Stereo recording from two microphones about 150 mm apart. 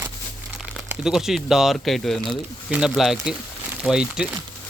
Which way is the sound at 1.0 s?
5° right (ahead or behind).